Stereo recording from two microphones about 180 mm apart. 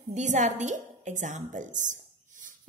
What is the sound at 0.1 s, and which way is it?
A woman's voice, 40° right (ahead or behind).